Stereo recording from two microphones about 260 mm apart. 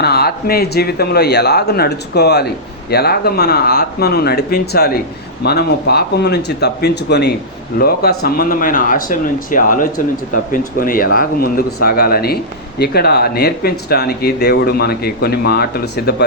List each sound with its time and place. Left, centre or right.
0.0 s speech: left